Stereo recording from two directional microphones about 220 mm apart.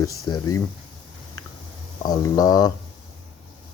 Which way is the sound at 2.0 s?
15° left (ahead or behind).